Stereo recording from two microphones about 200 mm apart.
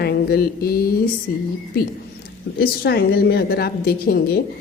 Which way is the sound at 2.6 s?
50° left (ahead or behind).